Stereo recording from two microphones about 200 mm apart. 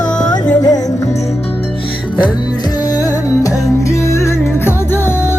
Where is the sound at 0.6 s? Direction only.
20° left (ahead or behind).